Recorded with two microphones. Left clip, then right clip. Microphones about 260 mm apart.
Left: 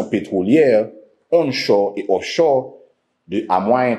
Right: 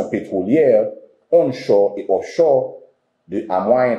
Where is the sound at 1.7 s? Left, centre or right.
Left.